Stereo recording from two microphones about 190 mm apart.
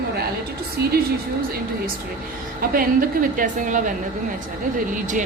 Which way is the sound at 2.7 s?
50° right (ahead or behind).